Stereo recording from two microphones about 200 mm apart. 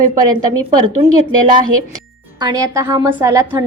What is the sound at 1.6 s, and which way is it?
A woman's voice, 20° right (ahead or behind).